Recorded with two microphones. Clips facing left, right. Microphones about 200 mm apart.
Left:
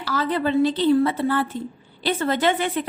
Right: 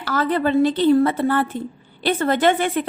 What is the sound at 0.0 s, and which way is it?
A woman's voice, 50° right (ahead or behind).